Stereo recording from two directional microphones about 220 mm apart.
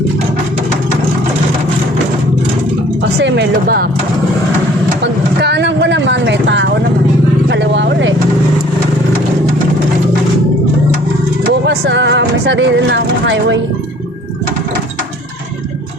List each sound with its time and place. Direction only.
3.2 s speech: 50° right (ahead or behind)
5.4 s vehicle: 50° right (ahead or behind)
11.6 s speech: 50° right (ahead or behind)